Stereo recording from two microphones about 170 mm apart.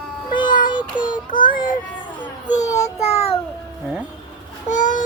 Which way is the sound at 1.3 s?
55° left (ahead or behind).